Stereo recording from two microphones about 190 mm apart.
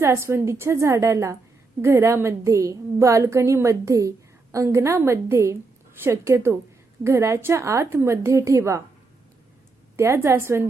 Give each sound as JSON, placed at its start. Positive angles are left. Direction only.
{"t": 0.0, "sound": "a woman's voice", "side_deg": -15}
{"t": 10.0, "sound": "a woman's voice", "side_deg": -15}